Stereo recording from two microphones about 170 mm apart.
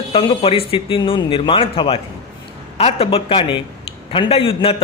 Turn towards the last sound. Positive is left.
turn(degrees=35)  # may be behind; listen again after turning